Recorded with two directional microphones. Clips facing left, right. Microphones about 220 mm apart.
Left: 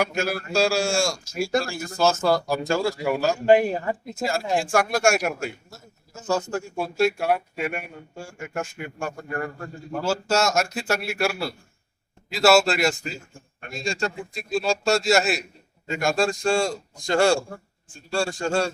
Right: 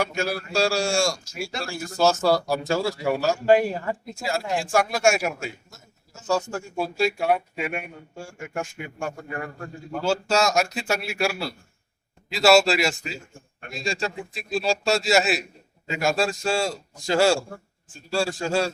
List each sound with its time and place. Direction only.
0.0 s speech: centre (ahead or behind)
3.4 s speech: 20° left (ahead or behind)
4.2 s speech: centre (ahead or behind)